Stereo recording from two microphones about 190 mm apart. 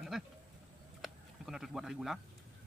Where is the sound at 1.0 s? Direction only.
Centre (ahead or behind).